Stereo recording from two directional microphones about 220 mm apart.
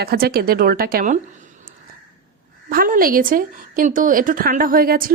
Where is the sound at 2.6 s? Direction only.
40° right (ahead or behind).